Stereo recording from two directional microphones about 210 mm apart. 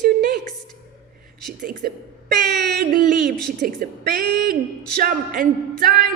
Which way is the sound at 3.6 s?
40° right (ahead or behind).